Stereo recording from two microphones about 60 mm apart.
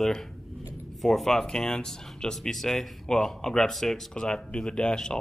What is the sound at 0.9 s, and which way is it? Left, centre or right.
Speech, centre.